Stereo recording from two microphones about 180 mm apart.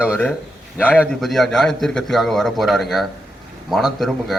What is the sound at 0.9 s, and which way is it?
Speech, centre (ahead or behind).